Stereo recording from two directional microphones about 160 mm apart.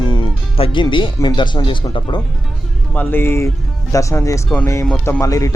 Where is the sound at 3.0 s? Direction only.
15° left (ahead or behind).